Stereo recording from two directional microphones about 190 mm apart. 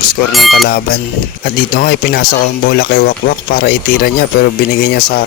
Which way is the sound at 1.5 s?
50° left (ahead or behind).